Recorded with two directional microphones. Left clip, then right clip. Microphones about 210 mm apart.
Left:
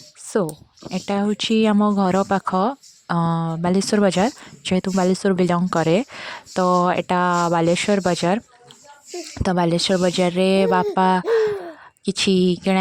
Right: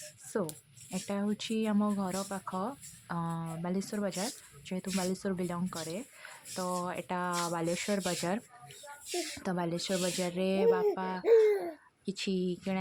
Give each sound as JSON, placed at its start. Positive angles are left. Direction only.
{"t": 0.3, "sound": "speech", "side_deg": 40}